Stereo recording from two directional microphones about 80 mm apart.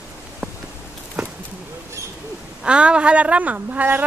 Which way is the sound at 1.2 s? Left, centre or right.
Centre.